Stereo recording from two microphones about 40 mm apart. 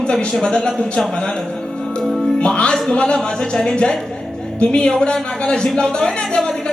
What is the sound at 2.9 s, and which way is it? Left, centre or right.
A man's voice, left.